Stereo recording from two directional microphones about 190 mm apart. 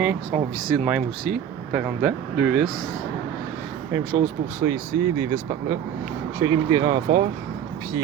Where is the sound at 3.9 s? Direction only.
15° right (ahead or behind).